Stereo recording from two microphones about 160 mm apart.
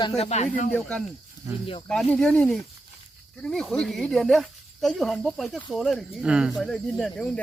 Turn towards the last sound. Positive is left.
turn(degrees=5)  # may be behind; listen again after turning